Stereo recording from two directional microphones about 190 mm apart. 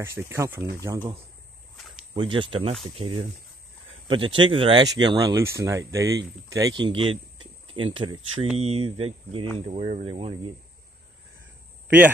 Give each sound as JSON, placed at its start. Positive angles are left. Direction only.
{"t": 0.0, "sound": "speech", "side_deg": -15}
{"t": 2.1, "sound": "speech", "side_deg": -25}
{"t": 6.8, "sound": "speech", "side_deg": -25}